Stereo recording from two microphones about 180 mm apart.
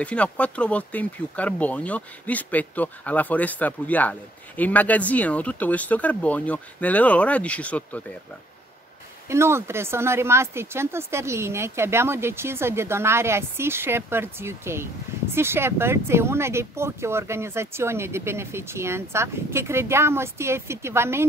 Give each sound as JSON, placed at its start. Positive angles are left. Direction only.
{"t": 0.0, "sound": "speech", "side_deg": 5}
{"t": 9.3, "sound": "speech", "side_deg": -15}